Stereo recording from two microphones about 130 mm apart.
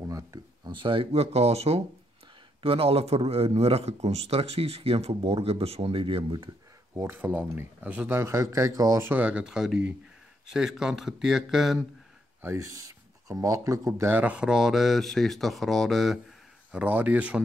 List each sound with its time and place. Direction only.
0.0 s a sound: 25° right (ahead or behind)
0.7 s speech: 40° right (ahead or behind)
7.0 s a man's voice: 15° right (ahead or behind); by 11.8 s centre (ahead or behind)
12.4 s speech: 20° right (ahead or behind); by 16.2 s centre (ahead or behind)
16.7 s a man's voice: 10° right (ahead or behind)